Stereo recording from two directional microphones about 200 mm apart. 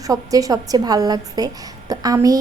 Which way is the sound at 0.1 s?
15° right (ahead or behind).